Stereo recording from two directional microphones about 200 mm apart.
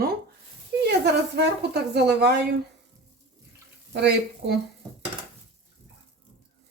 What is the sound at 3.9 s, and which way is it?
Speech, 55° right (ahead or behind).